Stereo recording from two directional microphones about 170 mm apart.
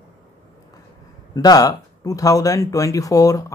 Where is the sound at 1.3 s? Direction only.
20° left (ahead or behind).